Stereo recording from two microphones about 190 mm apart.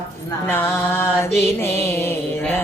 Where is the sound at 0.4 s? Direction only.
10° left (ahead or behind).